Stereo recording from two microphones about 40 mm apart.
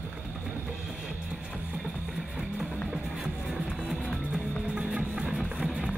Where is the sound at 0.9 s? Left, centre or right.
Centre.